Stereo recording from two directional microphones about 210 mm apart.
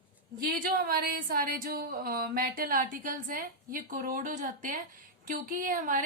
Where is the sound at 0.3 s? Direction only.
45° right (ahead or behind).